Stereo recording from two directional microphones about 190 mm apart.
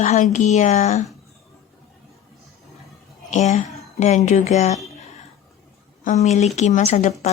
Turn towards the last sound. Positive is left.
turn(degrees=40)  # may be behind; listen again after turning